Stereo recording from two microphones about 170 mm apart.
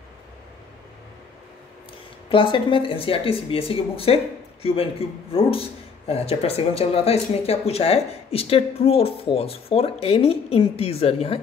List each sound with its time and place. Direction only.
2.2 s a man's voice: 30° left (ahead or behind)